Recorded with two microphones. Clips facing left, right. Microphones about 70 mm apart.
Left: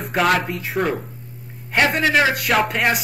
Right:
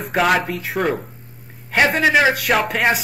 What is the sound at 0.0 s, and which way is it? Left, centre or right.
Speech, centre.